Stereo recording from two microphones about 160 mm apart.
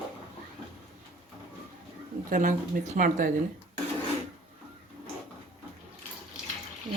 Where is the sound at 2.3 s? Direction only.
50° right (ahead or behind).